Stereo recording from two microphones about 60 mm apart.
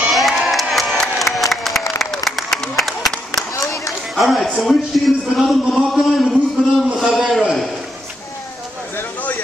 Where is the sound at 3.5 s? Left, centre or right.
Left.